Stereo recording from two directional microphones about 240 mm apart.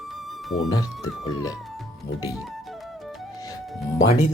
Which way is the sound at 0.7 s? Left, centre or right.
Centre.